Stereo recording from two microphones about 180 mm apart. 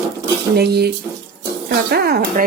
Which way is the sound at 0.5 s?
65° right (ahead or behind).